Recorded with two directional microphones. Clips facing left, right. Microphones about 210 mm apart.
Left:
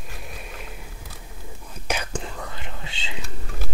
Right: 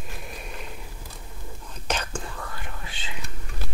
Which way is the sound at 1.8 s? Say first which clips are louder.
Left 1 dB; 10° left (ahead or behind).